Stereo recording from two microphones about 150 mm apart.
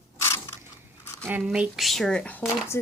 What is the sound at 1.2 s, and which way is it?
Speech, 10° right (ahead or behind).